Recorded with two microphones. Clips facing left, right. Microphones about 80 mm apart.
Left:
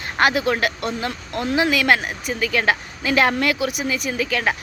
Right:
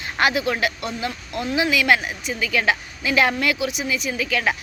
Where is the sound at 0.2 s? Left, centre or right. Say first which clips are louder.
Left 2 dB; left.